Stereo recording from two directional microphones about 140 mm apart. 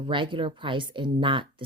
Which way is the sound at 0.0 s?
35° right (ahead or behind).